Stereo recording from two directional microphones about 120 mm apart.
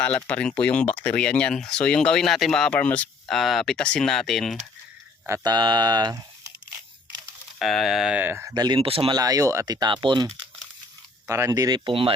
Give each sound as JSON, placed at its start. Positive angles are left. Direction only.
{"t": 0.0, "sound": "speech", "side_deg": 10}
{"t": 3.3, "sound": "speech", "side_deg": 0}
{"t": 5.4, "sound": "speech", "side_deg": -35}
{"t": 7.6, "sound": "speech", "side_deg": 0}
{"t": 8.5, "sound": "speech", "side_deg": -35}
{"t": 8.8, "sound": "speech", "side_deg": -50}
{"t": 9.1, "sound": "speech", "side_deg": -30}
{"t": 11.3, "sound": "speech", "side_deg": -25}